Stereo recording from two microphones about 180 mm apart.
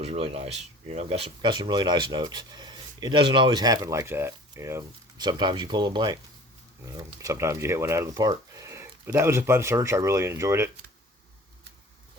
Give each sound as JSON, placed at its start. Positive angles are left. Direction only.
{"t": 0.0, "sound": "speech", "side_deg": -35}